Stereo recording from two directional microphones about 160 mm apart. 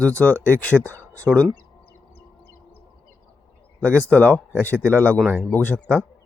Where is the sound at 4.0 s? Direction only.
10° left (ahead or behind).